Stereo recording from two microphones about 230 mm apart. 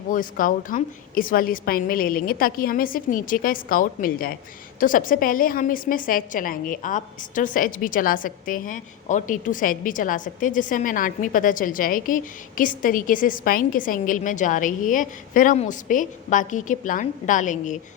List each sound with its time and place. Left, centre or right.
0.1 s a woman's voice: left